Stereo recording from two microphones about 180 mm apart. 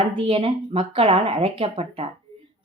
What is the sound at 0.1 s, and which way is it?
Speech, 30° right (ahead or behind).